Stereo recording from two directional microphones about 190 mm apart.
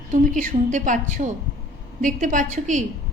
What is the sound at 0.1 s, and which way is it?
A woman's voice, 40° right (ahead or behind).